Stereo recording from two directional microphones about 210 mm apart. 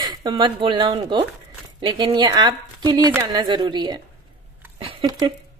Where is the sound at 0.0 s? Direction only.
20° right (ahead or behind).